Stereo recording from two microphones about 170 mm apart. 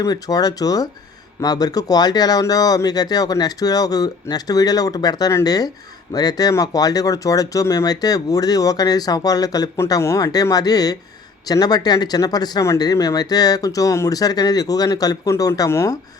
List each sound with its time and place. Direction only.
0.0 s speech: 20° left (ahead or behind)